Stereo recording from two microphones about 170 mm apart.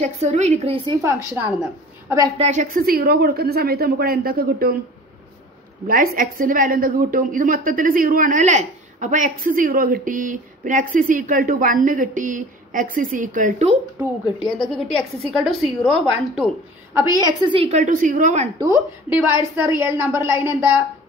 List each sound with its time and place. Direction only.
0.0 s a woman's voice: 40° right (ahead or behind)
0.8 s a woman's voice: 15° right (ahead or behind)
2.3 s a woman's voice: 40° right (ahead or behind); by 4.7 s 65° right (ahead or behind)
5.9 s a woman's voice: 55° right (ahead or behind)
14.4 s a woman's voice: centre (ahead or behind)
16.9 s a woman's voice: 20° right (ahead or behind); by 18.5 s 45° right (ahead or behind)
19.0 s a woman's voice: 10° right (ahead or behind)